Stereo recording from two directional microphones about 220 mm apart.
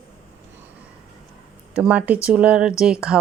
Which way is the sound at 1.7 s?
5° right (ahead or behind).